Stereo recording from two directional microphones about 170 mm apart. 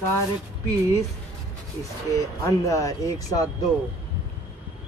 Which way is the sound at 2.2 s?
20° left (ahead or behind).